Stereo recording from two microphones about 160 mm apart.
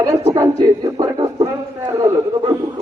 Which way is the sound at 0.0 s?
20° right (ahead or behind).